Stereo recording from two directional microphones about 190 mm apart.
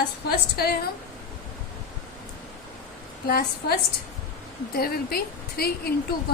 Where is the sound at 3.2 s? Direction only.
55° left (ahead or behind).